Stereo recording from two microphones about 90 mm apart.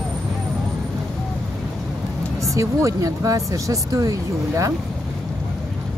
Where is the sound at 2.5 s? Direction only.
35° right (ahead or behind).